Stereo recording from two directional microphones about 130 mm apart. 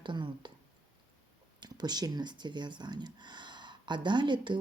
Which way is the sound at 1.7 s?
30° right (ahead or behind).